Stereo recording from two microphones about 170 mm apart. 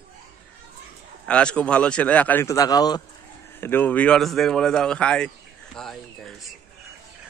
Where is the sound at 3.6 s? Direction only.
10° left (ahead or behind).